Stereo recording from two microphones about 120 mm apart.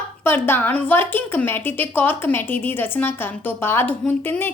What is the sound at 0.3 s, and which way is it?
A woman's voice, 20° left (ahead or behind).